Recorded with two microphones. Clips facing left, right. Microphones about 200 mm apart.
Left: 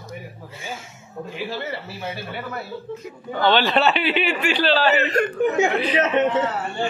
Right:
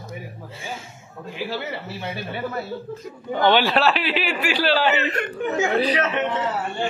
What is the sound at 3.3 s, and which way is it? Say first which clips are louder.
Speech: right 1 dB; 15° right (ahead or behind).